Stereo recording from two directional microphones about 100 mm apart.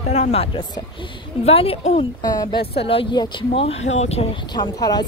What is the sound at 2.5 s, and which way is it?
Speech, 70° left (ahead or behind).